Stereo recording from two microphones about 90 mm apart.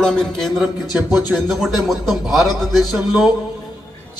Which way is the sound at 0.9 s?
20° right (ahead or behind).